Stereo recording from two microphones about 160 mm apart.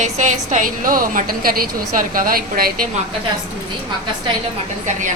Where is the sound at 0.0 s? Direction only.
50° right (ahead or behind); by 2.8 s 65° right (ahead or behind).